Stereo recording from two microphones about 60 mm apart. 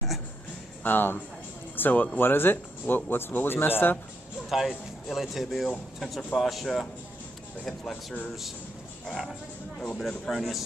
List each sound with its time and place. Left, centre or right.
0.8 s speech: left
4.5 s a man's voice: centre
9.8 s a man's voice: centre